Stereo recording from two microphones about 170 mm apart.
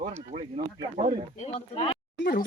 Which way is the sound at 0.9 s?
40° right (ahead or behind).